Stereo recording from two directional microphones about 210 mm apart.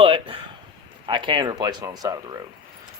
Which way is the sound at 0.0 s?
25° right (ahead or behind).